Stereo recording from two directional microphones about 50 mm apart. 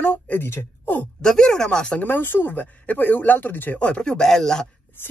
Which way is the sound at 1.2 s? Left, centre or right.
Centre.